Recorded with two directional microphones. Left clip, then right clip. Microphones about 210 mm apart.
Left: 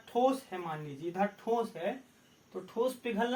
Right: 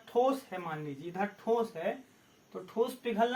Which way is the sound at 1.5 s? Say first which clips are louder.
Right 3 dB; 20° left (ahead or behind).